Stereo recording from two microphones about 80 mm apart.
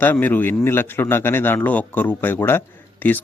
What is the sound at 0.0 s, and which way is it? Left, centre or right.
Speech, left.